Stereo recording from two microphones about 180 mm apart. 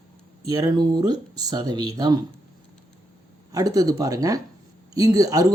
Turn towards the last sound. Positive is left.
turn(degrees=-20)  # may be behind; listen again after turning